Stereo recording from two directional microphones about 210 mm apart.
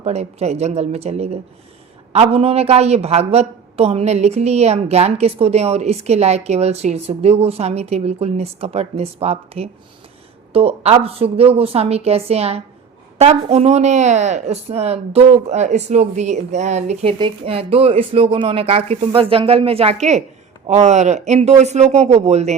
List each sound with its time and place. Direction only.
0.0 s a woman's voice: 30° right (ahead or behind)